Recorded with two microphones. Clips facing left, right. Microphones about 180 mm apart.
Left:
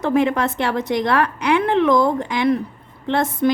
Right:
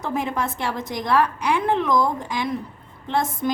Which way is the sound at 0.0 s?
70° left (ahead or behind).